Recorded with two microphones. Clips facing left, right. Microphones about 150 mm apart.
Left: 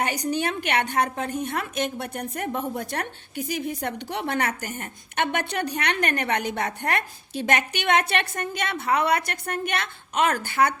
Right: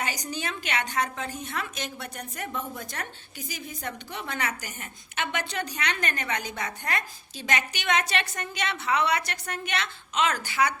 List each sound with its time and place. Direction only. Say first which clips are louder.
0.0 s a woman's voice: left 7 dB; 60° left (ahead or behind)